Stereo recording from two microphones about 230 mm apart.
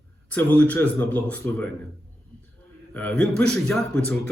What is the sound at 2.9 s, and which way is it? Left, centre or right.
Speech, centre.